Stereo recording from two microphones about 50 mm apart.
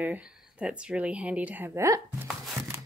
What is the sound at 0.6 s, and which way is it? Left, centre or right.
Speech, right.